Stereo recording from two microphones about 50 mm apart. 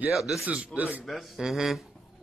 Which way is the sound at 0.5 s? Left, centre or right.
Right.